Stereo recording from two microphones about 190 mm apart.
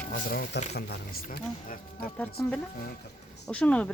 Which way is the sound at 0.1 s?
50° left (ahead or behind).